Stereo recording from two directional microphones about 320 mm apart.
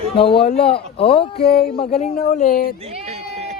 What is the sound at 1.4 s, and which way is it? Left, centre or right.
Speech, left.